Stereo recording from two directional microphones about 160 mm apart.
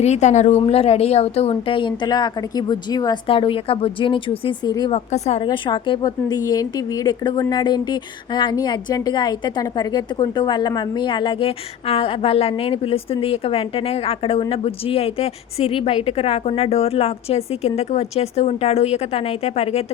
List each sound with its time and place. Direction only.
0.0 s a woman's voice: 45° left (ahead or behind); by 4.9 s 25° left (ahead or behind)
4.9 s a woman's voice: 45° left (ahead or behind)
5.5 s a woman's voice: 30° left (ahead or behind)